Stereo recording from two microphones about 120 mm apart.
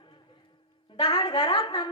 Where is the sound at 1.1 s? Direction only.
45° left (ahead or behind).